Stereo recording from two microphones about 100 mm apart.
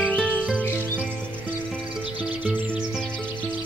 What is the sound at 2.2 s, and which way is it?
Music, 15° right (ahead or behind).